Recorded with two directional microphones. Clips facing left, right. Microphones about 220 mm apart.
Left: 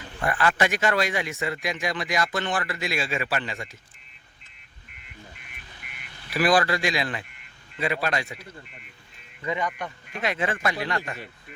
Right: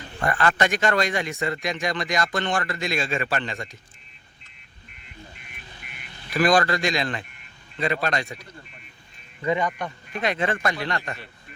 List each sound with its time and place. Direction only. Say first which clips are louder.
0.2 s speech: right 1 dB; 5° left (ahead or behind)
5.4 s a sound: right 3 dB; 25° right (ahead or behind)
6.3 s speech: right 2 dB; 5° left (ahead or behind)
9.4 s speech: right 5 dB; 35° right (ahead or behind)
10.2 s speech: right 2 dB; 5° left (ahead or behind)